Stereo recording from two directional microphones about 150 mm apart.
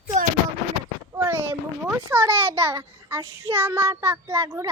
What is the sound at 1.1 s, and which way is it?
A child's voice, 15° right (ahead or behind).